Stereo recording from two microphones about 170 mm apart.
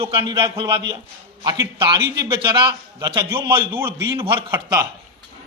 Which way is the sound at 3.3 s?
15° right (ahead or behind).